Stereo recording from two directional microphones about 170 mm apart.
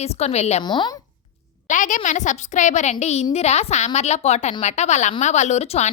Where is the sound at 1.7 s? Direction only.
50° left (ahead or behind).